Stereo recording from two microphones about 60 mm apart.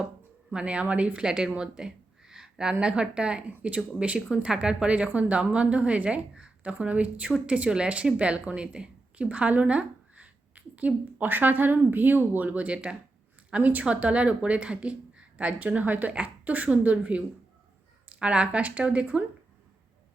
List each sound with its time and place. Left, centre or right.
0.5 s a woman's voice: centre